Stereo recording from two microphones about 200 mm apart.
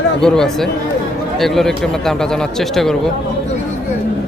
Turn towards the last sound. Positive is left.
turn(degrees=0)  # may be behind; listen again after turning